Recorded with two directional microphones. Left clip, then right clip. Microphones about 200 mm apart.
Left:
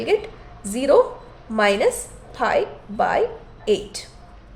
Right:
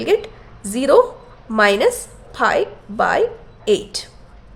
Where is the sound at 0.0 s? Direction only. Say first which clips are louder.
Right 3 dB; 30° right (ahead or behind).